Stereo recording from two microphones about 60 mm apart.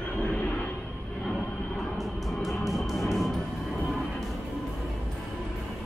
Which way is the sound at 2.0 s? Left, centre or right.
Centre.